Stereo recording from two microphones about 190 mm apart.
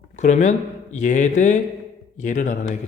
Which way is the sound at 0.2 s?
40° left (ahead or behind).